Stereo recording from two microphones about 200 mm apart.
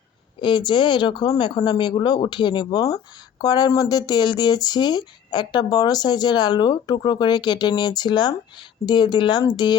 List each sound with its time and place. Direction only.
0.3 s speech: 25° left (ahead or behind)